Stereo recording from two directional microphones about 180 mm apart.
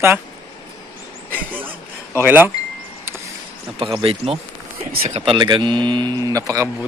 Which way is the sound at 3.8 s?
30° right (ahead or behind).